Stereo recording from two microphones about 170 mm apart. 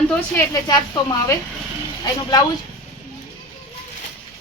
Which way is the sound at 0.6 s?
25° left (ahead or behind).